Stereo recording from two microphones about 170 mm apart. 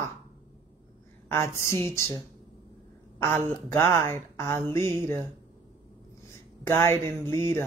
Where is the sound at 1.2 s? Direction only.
15° left (ahead or behind).